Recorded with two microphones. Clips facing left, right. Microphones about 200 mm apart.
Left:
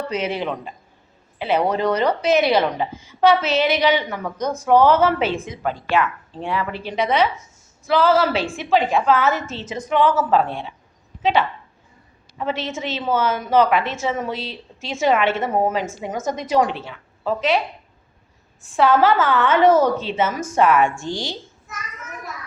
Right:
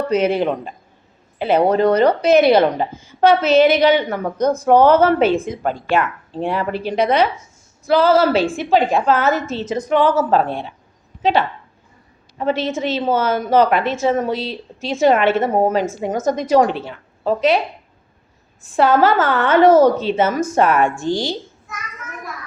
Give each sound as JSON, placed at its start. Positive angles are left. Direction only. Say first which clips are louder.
{"t": 0.1, "sound": "a woman's voice", "louder": "right 10 dB", "side_deg": -55}
{"t": 2.7, "sound": "a woman's voice", "louder": "right 3 dB", "side_deg": -45}
{"t": 12.5, "sound": "a woman's voice", "louder": "right 6 dB", "side_deg": -35}
{"t": 18.8, "sound": "a woman's voice", "louder": "right 2 dB", "side_deg": -45}